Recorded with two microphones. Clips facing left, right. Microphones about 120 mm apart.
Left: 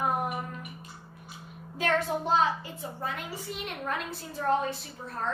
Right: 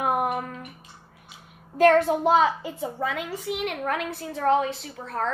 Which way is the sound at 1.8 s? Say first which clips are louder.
Right 10 dB; 55° right (ahead or behind).